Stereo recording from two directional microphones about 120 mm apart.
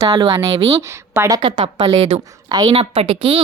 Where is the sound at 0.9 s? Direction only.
25° right (ahead or behind).